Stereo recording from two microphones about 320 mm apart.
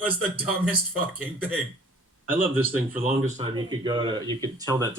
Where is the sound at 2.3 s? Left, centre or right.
Centre.